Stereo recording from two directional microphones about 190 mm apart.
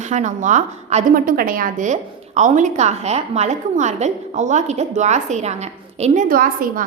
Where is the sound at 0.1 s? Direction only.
40° right (ahead or behind).